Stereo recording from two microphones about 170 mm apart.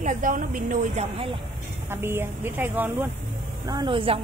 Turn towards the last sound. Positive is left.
turn(degrees=-30)  # may be behind; listen again after turning